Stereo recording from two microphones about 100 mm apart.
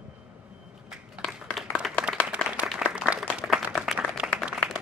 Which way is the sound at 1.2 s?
10° left (ahead or behind).